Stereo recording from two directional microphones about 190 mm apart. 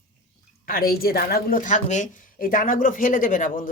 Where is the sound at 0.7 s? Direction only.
50° left (ahead or behind).